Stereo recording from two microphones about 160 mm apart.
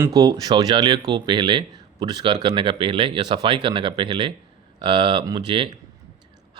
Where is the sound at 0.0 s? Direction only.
20° right (ahead or behind).